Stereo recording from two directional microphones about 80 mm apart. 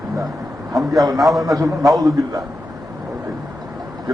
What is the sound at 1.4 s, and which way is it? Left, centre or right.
Speech, right.